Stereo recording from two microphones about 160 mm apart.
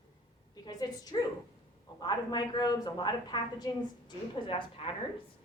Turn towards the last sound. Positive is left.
turn(degrees=35)  # may be behind; listen again after turning